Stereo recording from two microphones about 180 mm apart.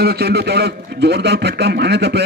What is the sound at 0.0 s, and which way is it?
A man's voice, 65° right (ahead or behind).